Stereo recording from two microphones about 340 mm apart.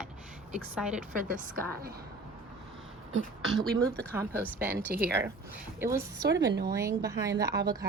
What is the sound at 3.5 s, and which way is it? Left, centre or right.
Speech, centre.